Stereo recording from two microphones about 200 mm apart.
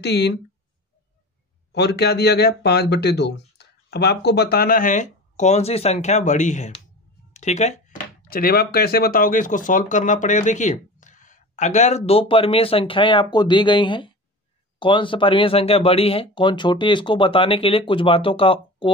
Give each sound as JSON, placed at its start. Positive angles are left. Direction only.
{"t": 0.0, "sound": "speech", "side_deg": 55}
{"t": 1.7, "sound": "speech", "side_deg": 55}